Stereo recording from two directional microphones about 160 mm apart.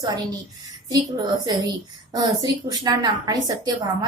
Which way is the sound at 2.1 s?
25° right (ahead or behind).